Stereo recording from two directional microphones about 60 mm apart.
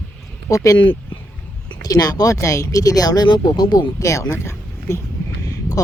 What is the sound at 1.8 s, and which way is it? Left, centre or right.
Speech, left.